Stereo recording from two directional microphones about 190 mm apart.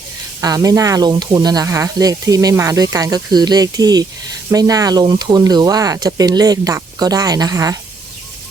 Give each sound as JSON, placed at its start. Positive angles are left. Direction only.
{"t": 0.4, "sound": "speech", "side_deg": -20}